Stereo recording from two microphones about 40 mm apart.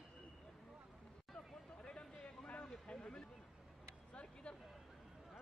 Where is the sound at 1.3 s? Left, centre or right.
Left.